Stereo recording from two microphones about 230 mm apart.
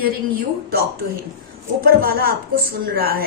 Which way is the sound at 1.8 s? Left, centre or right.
Right.